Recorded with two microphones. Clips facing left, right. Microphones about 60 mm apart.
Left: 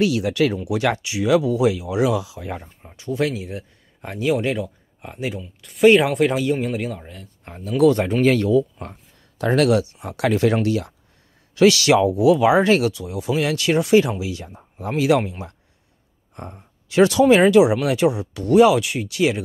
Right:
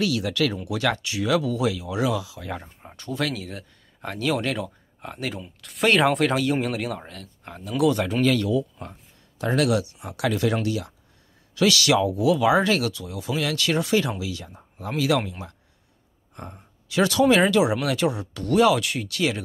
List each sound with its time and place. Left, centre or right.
0.0 s speech: left
5.6 s speech: centre
7.4 s speech: left
9.4 s speech: left
16.3 s speech: centre
16.9 s speech: left
17.2 s speech: centre